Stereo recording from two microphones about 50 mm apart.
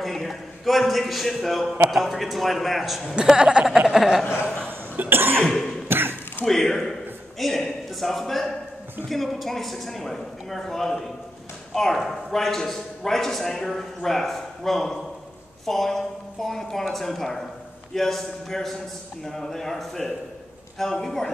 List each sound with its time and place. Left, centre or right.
0.0 s a man's voice: centre
3.2 s speech: centre
5.1 s cough: right
6.4 s a man's voice: centre